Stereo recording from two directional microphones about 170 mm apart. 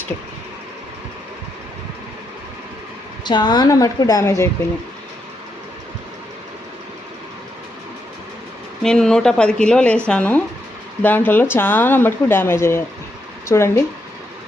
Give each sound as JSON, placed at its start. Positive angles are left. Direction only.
{"t": 3.2, "sound": "a woman's voice", "side_deg": 25}
{"t": 8.8, "sound": "speech", "side_deg": 5}